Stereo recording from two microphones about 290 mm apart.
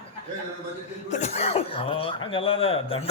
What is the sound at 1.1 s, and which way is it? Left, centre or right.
Speech, left.